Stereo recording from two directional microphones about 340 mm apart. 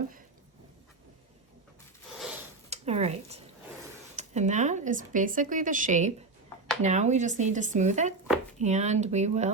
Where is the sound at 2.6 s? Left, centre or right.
Centre.